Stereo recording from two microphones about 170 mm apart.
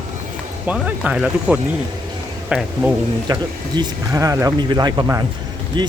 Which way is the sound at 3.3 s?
25° right (ahead or behind).